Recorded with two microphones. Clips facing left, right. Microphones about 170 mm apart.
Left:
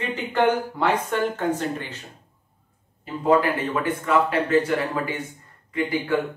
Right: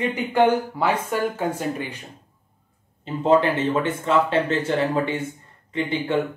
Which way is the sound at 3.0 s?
25° right (ahead or behind).